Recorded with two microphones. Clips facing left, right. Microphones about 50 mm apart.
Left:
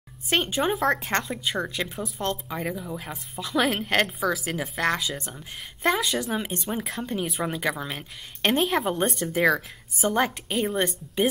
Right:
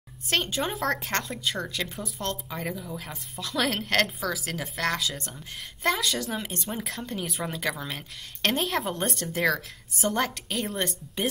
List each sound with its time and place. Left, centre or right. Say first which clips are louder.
0.3 s a woman's voice: left 4 dB; centre